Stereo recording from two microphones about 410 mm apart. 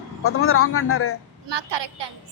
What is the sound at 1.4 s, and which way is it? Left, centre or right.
Speech, right.